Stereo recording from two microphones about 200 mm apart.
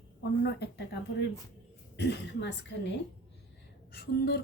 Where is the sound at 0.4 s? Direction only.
55° left (ahead or behind).